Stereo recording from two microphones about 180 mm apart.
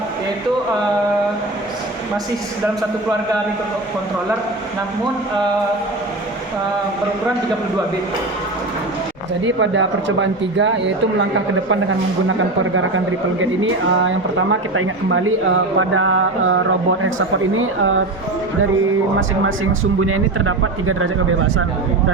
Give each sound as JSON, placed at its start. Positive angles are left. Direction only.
{"t": 9.6, "sound": "speech", "side_deg": -90}
{"t": 13.4, "sound": "speech", "side_deg": -90}
{"t": 15.8, "sound": "speech", "side_deg": -90}